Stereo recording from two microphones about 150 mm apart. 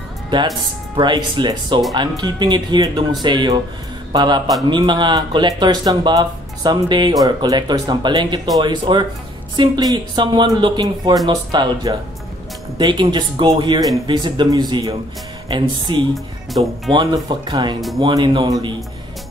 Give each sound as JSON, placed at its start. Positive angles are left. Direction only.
{"t": 0.3, "sound": "speech", "side_deg": -30}
{"t": 16.5, "sound": "speech", "side_deg": 0}
{"t": 16.9, "sound": "speech", "side_deg": -30}